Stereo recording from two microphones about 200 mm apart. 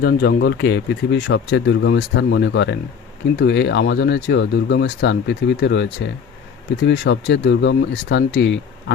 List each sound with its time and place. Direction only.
0.0 s speech: 50° left (ahead or behind)